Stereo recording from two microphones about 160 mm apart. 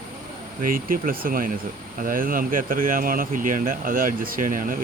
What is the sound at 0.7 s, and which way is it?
Speech, 60° right (ahead or behind).